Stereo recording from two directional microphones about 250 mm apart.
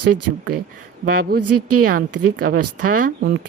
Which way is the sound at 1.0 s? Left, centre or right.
Right.